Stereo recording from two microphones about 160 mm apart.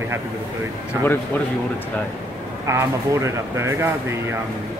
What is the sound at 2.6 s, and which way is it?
Speech, 15° right (ahead or behind).